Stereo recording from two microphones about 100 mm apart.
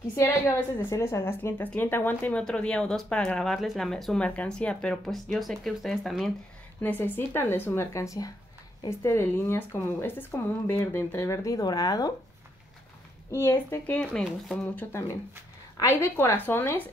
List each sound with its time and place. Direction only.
0.1 s a woman's voice: 30° left (ahead or behind); by 6.3 s centre (ahead or behind)
6.8 s a woman's voice: 20° left (ahead or behind); by 12.1 s 40° left (ahead or behind)
13.3 s a woman's voice: 25° left (ahead or behind)
13.9 s speech: 10° left (ahead or behind)
14.9 s a woman's voice: 30° left (ahead or behind)